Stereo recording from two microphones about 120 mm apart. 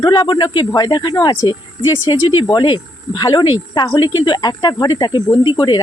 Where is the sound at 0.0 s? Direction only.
35° left (ahead or behind).